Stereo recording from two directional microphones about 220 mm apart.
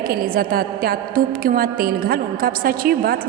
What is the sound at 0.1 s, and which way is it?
A woman's voice, 40° right (ahead or behind).